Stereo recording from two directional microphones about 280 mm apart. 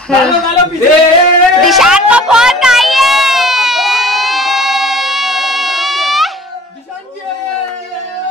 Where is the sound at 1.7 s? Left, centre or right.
Centre.